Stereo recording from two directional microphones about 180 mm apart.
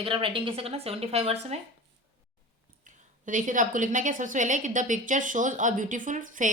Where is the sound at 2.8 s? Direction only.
45° right (ahead or behind).